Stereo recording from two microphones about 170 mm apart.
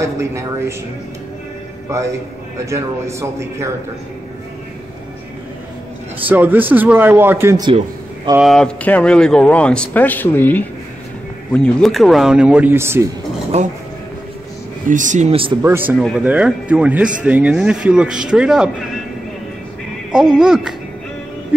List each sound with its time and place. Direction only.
0.0 s speech: 15° right (ahead or behind)
2.6 s speech: 15° right (ahead or behind)
6.2 s speech: 10° right (ahead or behind)
8.4 s speech: centre (ahead or behind); by 13.1 s 15° right (ahead or behind)
13.5 s speech: 40° right (ahead or behind)
14.9 s speech: 50° right (ahead or behind)
15.6 s speech: 10° right (ahead or behind)
20.1 s speech: 5° right (ahead or behind)